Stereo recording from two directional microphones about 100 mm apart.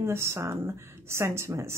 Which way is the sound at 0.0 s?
25° right (ahead or behind).